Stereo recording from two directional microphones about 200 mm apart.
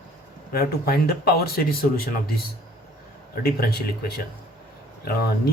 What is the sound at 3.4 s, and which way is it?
Speech, 50° left (ahead or behind).